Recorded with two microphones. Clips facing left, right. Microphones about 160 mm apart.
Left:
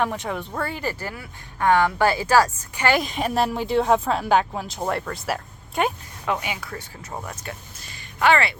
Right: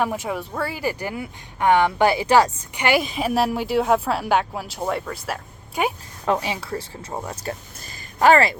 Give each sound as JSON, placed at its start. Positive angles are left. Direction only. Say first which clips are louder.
{"t": 0.0, "sound": "speech", "louder": "right 1 dB", "side_deg": -10}
{"t": 3.0, "sound": "speech", "louder": "right 1 dB", "side_deg": -5}
{"t": 6.2, "sound": "speech", "louder": "right 4 dB", "side_deg": -35}
{"t": 7.4, "sound": "speech", "louder": "right 6 dB", "side_deg": -40}